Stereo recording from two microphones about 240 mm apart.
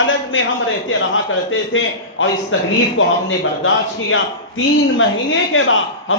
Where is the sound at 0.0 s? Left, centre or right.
Left.